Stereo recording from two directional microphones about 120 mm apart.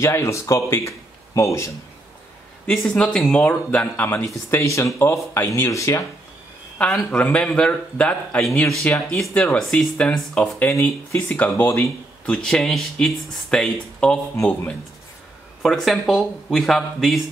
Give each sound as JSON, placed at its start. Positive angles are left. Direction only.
{"t": 0.0, "sound": "speech", "side_deg": 25}
{"t": 2.6, "sound": "speech", "side_deg": 10}
{"t": 3.3, "sound": "speech", "side_deg": 15}
{"t": 6.8, "sound": "speech", "side_deg": 10}